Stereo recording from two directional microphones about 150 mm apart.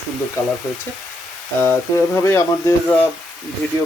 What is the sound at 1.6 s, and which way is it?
Speech, 15° left (ahead or behind).